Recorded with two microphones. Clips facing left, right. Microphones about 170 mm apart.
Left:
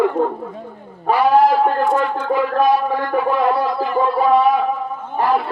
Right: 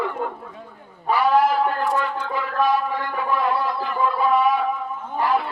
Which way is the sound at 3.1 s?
40° left (ahead or behind).